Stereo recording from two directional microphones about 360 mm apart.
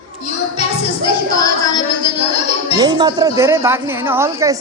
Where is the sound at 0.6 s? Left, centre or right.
Centre.